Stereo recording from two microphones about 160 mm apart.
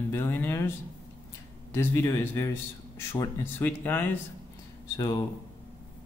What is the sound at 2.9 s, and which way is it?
Speech, 25° left (ahead or behind).